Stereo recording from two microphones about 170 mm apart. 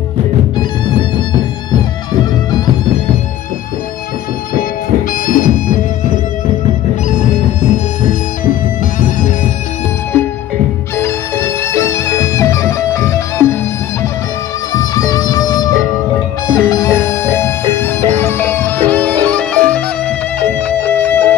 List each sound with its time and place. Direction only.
0.6 s music: 25° left (ahead or behind)
5.2 s music: 50° left (ahead or behind)
7.7 s music: 50° left (ahead or behind)
11.0 s music: 15° left (ahead or behind)
14.7 s music: 20° left (ahead or behind)